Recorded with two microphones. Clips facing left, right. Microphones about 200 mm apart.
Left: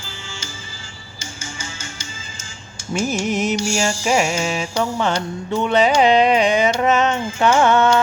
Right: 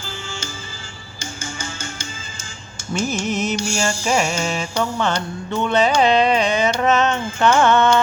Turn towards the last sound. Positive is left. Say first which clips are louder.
# even
turn(degrees=10)  # may be behind; listen again after turning